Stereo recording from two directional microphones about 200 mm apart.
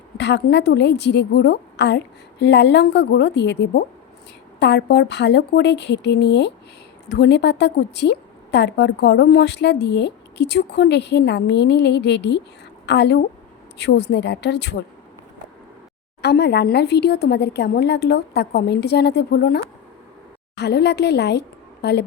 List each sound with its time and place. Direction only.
0.2 s a woman's voice: 60° left (ahead or behind)
16.2 s a woman's voice: 55° left (ahead or behind)
20.6 s speech: 55° left (ahead or behind)